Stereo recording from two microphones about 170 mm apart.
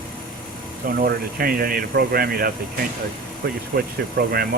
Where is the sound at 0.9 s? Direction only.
60° right (ahead or behind).